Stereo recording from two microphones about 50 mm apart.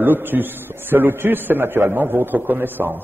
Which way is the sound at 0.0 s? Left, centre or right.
Right.